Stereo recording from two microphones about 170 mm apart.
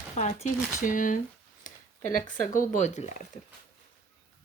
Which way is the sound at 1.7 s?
50° left (ahead or behind).